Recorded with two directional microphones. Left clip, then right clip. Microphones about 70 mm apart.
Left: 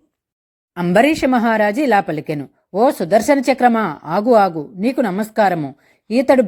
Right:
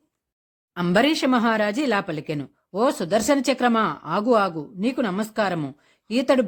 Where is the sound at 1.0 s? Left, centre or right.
Left.